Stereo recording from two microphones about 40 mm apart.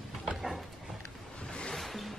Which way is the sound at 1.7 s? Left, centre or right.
Centre.